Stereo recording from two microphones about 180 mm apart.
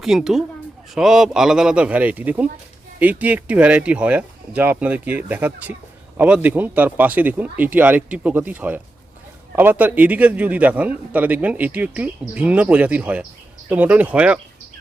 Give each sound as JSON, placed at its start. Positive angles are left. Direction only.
{"t": 0.0, "sound": "a man's voice", "side_deg": 0}